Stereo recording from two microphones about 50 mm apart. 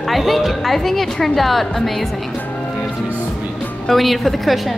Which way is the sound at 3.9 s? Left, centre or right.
Centre.